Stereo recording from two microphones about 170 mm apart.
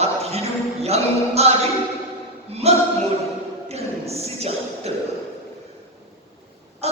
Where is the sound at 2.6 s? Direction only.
40° right (ahead or behind).